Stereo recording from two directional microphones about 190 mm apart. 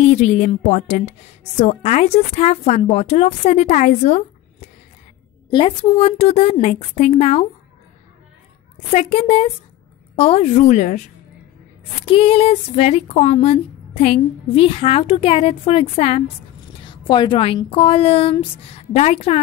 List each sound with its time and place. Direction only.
0.0 s speech: 40° left (ahead or behind)
8.9 s speech: 30° left (ahead or behind)
12.1 s speech: 30° left (ahead or behind)